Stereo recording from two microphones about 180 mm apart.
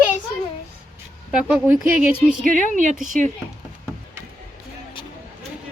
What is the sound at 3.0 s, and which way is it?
Speech, 45° right (ahead or behind).